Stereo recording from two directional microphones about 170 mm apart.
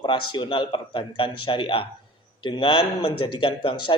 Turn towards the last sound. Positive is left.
turn(degrees=30)  # may be behind; listen again after turning